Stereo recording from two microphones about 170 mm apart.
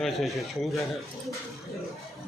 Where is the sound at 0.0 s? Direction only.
Centre (ahead or behind).